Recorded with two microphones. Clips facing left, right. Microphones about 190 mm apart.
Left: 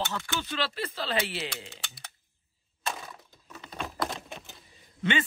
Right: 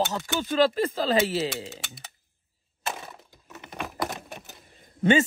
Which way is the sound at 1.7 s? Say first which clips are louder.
Right 5 dB; 20° right (ahead or behind).